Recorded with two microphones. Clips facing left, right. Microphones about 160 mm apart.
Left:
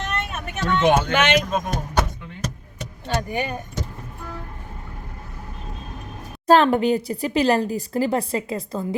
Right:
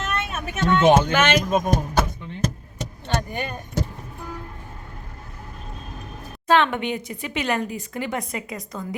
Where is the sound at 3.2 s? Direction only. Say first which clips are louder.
Left 3 dB; 10° left (ahead or behind).